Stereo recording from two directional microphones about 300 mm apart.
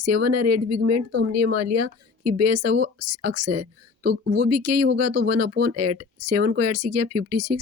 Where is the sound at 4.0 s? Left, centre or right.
Right.